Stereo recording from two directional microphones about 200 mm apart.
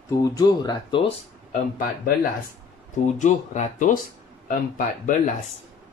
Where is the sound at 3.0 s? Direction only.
35° left (ahead or behind).